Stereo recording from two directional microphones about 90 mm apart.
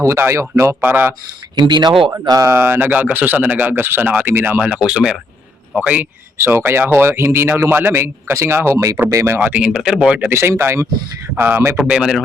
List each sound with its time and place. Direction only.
0.0 s speech: 30° right (ahead or behind)
1.5 s speech: 55° right (ahead or behind)
2.2 s speech: 40° right (ahead or behind)
2.5 s speech: 25° right (ahead or behind)
4.7 s speech: 10° right (ahead or behind)
6.3 s speech: 25° right (ahead or behind)
9.4 s speech: 10° right (ahead or behind)
10.2 s speech: 25° right (ahead or behind)
11.9 s speech: 10° right (ahead or behind)